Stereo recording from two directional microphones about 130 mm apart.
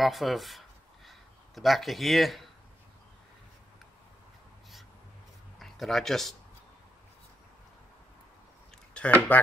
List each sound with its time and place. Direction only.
0.0 s a sound: centre (ahead or behind)
5.6 s speech: centre (ahead or behind)
8.9 s speech: 10° left (ahead or behind)